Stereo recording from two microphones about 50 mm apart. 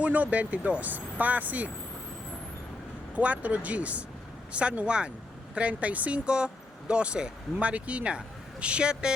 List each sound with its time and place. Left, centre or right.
0.0 s speech: right
3.2 s speech: right